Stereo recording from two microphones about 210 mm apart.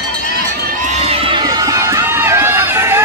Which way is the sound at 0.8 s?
30° right (ahead or behind).